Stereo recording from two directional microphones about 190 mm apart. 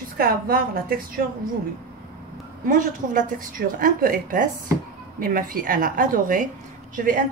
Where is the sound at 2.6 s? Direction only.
45° right (ahead or behind).